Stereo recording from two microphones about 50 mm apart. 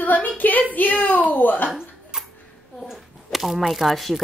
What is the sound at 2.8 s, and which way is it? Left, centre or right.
Speech, centre.